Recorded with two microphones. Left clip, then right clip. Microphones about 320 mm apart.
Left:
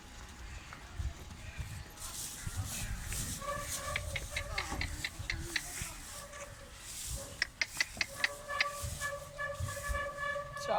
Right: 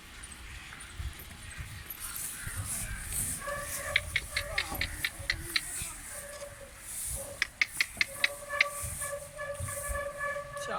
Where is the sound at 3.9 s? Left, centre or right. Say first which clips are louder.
Right 8 dB; left.